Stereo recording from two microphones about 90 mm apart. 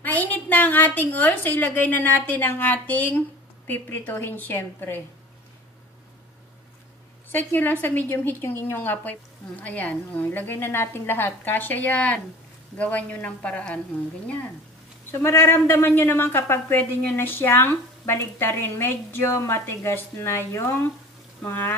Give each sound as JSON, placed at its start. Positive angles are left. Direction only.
{"t": 0.0, "sound": "a woman's voice", "side_deg": 20}
{"t": 7.2, "sound": "a woman's voice", "side_deg": 20}
{"t": 15.0, "sound": "a woman's voice", "side_deg": 25}